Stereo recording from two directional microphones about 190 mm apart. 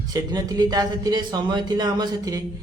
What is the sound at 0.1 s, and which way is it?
A man's voice, 20° right (ahead or behind).